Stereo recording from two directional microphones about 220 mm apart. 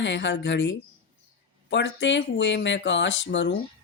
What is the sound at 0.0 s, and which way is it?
A woman's voice, 55° left (ahead or behind).